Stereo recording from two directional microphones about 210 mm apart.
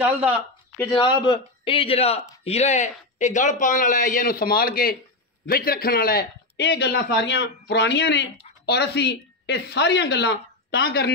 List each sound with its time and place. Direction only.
0.0 s speech: 5° right (ahead or behind)
0.8 s a man's voice: 20° left (ahead or behind); by 11.1 s 50° left (ahead or behind)